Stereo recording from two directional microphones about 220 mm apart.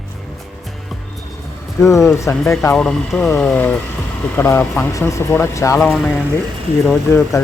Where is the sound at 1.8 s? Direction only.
15° left (ahead or behind).